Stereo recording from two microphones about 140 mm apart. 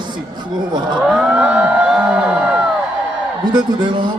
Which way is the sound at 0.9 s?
5° right (ahead or behind).